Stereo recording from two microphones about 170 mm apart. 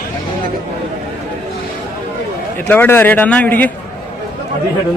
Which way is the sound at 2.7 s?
10° left (ahead or behind).